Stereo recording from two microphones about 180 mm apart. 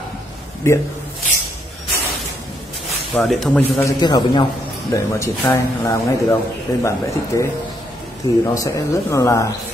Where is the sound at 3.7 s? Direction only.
20° left (ahead or behind).